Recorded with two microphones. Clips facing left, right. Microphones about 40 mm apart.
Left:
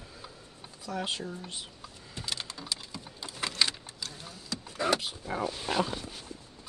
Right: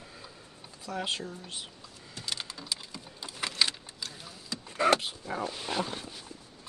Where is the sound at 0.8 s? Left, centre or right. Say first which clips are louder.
Even; centre.